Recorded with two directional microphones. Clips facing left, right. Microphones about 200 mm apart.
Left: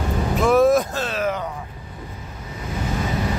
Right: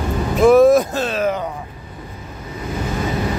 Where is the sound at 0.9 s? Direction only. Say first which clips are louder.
Right 4 dB; 20° right (ahead or behind).